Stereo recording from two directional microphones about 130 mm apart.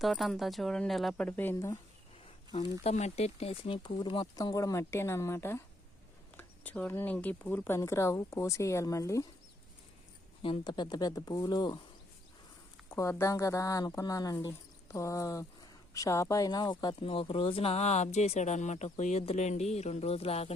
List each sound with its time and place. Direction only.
0.0 s speech: centre (ahead or behind); by 1.8 s 20° left (ahead or behind)
2.8 s speech: 55° left (ahead or behind); by 4.3 s 40° left (ahead or behind)
4.4 s speech: 25° left (ahead or behind)
10.4 s speech: 40° left (ahead or behind)
12.9 s speech: 25° left (ahead or behind)
17.1 s speech: 45° left (ahead or behind)